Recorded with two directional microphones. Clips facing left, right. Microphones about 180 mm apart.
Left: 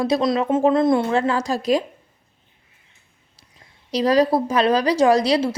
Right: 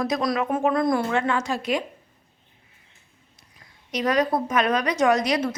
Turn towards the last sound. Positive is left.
turn(degrees=30)  # may be behind; listen again after turning